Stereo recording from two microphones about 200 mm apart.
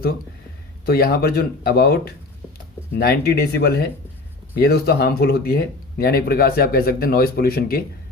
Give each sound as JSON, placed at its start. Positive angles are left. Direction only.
{"t": 0.9, "sound": "speech", "side_deg": 50}